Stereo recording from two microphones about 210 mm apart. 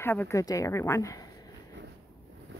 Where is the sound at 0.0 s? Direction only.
10° left (ahead or behind).